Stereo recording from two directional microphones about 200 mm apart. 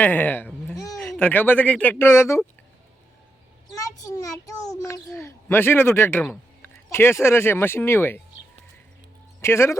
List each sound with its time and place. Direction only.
0.0 s bleat: 10° left (ahead or behind)
0.9 s a man's voice: centre (ahead or behind)
3.8 s a man's voice: 15° left (ahead or behind)
9.4 s a man's voice: 15° left (ahead or behind)